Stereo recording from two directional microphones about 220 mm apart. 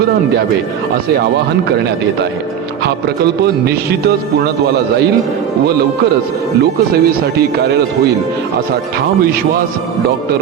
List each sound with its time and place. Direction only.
6.6 s speech: 45° right (ahead or behind)